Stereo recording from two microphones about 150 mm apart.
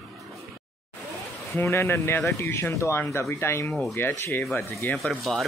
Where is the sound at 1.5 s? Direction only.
15° left (ahead or behind).